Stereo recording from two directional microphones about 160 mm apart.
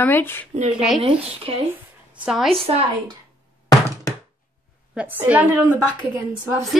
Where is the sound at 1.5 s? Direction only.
35° right (ahead or behind).